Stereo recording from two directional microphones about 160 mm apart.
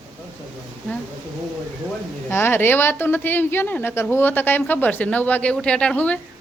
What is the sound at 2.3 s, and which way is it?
A woman's voice, 15° left (ahead or behind).